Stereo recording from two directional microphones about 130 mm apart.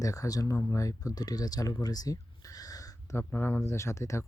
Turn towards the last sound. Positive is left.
turn(degrees=20)  # may be behind; listen again after turning